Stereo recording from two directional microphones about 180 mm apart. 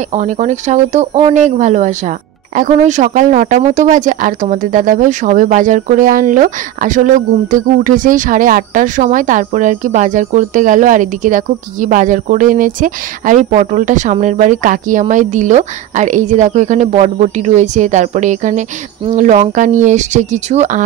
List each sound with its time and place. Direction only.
0.1 s speech: 40° right (ahead or behind)